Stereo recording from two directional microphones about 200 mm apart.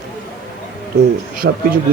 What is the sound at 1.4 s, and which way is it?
Speech, 65° right (ahead or behind).